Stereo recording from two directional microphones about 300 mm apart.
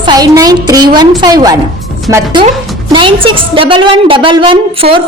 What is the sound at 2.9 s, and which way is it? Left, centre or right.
A woman's voice, centre.